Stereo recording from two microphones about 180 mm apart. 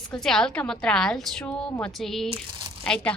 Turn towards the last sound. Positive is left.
turn(degrees=5)  # may be behind; listen again after turning